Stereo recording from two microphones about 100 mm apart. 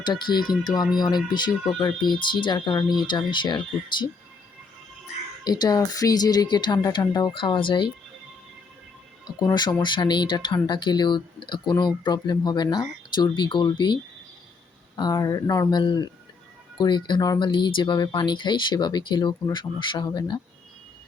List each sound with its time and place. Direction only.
0.0 s speech: 45° left (ahead or behind)
5.5 s speech: 40° left (ahead or behind)
7.3 s speech: 60° left (ahead or behind)
9.4 s speech: 45° left (ahead or behind)
15.1 s speech: 35° left (ahead or behind)
15.8 s speech: 50° left (ahead or behind)
17.4 s speech: 50° left (ahead or behind)